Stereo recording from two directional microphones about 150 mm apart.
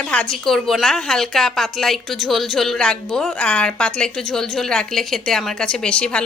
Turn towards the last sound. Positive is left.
turn(degrees=5)  # may be behind; listen again after turning